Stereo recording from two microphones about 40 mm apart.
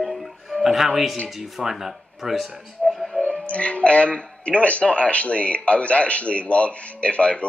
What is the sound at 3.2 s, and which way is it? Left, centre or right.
Speech, left.